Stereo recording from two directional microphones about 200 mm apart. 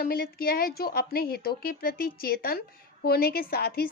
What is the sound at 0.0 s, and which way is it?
A woman's voice, 50° left (ahead or behind).